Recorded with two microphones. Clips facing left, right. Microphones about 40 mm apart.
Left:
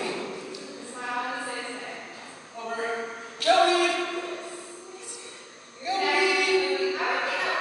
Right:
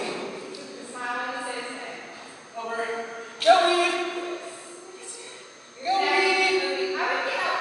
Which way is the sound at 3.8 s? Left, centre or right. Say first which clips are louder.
Right 1 dB; centre.